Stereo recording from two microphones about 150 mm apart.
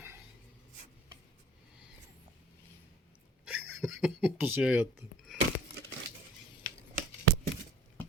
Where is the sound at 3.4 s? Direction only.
5° right (ahead or behind).